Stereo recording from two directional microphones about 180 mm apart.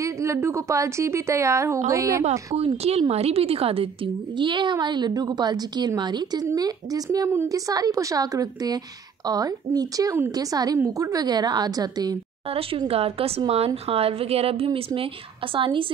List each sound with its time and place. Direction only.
0.0 s a woman's voice: 15° right (ahead or behind)
2.5 s a woman's voice: 35° right (ahead or behind)
12.4 s a woman's voice: 30° right (ahead or behind)